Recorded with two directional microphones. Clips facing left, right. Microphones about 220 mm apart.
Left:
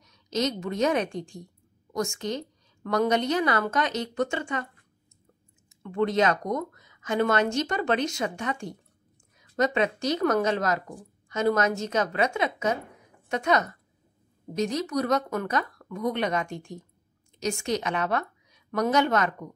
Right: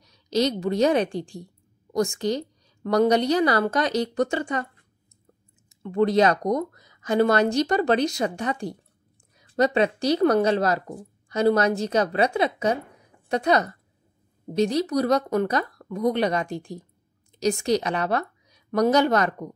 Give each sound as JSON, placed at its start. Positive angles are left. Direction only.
{"t": 0.0, "sound": "a woman's voice", "side_deg": -35}
{"t": 5.8, "sound": "a woman's voice", "side_deg": -35}